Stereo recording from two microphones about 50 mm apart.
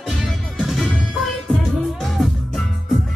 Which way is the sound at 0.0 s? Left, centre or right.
Centre.